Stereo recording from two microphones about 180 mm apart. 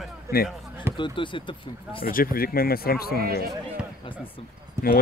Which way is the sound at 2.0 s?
55° left (ahead or behind).